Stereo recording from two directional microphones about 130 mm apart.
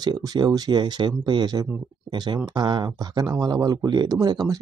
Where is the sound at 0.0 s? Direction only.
30° right (ahead or behind).